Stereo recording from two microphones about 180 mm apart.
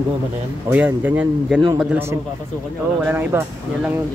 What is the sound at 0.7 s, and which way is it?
Speech, 10° right (ahead or behind).